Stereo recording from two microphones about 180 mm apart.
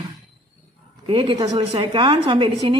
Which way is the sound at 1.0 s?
30° right (ahead or behind).